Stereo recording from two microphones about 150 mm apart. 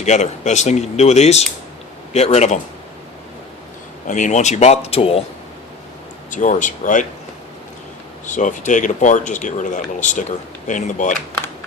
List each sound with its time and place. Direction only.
0.0 s speech: 50° left (ahead or behind)
4.0 s speech: 55° left (ahead or behind); by 5.2 s 40° left (ahead or behind)
6.3 s speech: 55° left (ahead or behind)
8.3 s speech: 55° left (ahead or behind)